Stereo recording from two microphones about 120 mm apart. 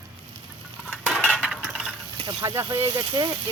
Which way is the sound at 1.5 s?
5° right (ahead or behind).